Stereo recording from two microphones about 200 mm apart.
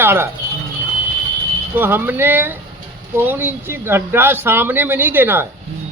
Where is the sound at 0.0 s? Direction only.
10° right (ahead or behind).